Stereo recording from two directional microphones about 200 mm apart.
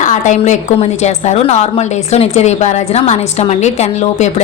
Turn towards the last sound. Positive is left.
turn(degrees=35)  # may be behind; listen again after turning